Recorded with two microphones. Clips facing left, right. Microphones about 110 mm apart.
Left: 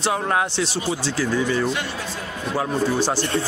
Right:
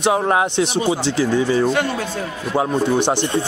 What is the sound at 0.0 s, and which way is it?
A man's voice, 20° right (ahead or behind).